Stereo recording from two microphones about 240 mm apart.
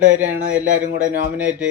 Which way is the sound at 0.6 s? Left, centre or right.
Right.